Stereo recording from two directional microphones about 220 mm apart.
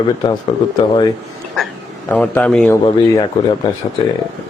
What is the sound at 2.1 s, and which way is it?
A man's voice, 5° left (ahead or behind).